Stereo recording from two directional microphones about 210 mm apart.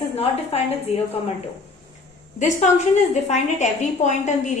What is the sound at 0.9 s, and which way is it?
Speech, 30° left (ahead or behind).